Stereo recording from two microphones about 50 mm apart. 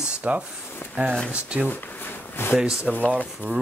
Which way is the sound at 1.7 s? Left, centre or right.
Left.